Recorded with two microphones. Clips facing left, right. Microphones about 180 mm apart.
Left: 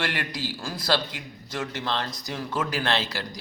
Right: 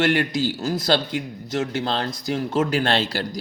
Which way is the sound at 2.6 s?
45° right (ahead or behind).